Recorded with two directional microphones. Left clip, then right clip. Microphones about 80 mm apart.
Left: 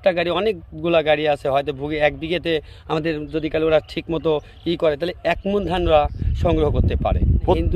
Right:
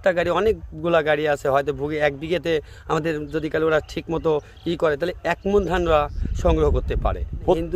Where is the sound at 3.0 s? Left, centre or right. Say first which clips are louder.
Left 1 dB; right.